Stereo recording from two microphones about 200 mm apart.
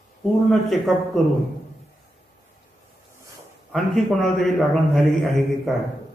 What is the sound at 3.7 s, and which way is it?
A man's voice, centre (ahead or behind).